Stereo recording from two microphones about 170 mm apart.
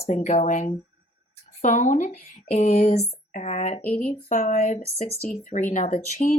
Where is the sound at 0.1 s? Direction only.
40° left (ahead or behind).